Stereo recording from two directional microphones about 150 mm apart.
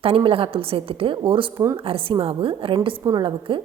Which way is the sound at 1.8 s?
40° right (ahead or behind).